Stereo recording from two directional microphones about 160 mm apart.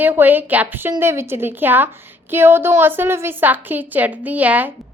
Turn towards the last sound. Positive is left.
turn(degrees=-10)  # may be behind; listen again after turning